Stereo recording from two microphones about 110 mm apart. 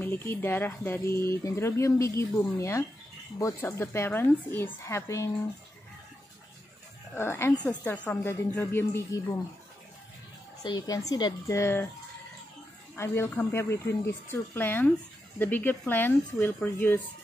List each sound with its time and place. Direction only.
0.0 s speech: 20° left (ahead or behind)
7.2 s speech: 25° left (ahead or behind)
7.6 s speech: 10° left (ahead or behind)
10.6 s a woman's voice: 35° left (ahead or behind)
11.4 s speech: 25° left (ahead or behind)
12.9 s speech: 25° left (ahead or behind)